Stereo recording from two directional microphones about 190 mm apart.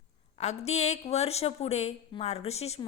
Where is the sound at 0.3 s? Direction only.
35° left (ahead or behind).